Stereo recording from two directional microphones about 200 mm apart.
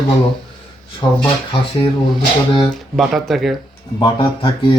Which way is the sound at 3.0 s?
Centre (ahead or behind).